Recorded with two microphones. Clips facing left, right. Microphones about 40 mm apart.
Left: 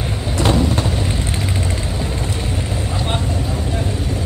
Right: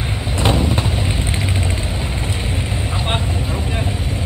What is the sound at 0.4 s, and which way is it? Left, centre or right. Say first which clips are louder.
Vehicle: left 1 dB; centre.